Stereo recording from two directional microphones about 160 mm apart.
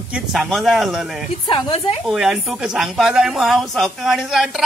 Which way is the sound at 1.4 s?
35° left (ahead or behind).